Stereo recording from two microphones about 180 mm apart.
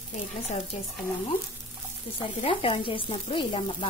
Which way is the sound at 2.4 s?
30° left (ahead or behind).